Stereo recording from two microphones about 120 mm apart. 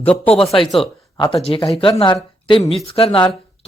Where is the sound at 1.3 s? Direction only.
50° left (ahead or behind).